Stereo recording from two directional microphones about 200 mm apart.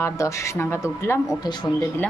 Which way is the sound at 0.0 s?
15° left (ahead or behind).